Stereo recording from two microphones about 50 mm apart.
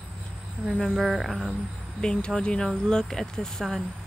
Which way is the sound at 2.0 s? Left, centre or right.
Centre.